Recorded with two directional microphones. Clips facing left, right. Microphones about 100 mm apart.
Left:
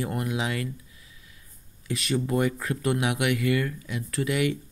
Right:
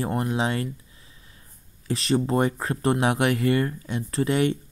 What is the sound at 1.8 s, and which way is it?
Speech, 35° right (ahead or behind).